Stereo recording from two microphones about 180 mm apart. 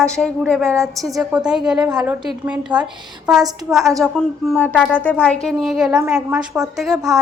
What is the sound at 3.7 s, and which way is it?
A woman's voice, centre (ahead or behind).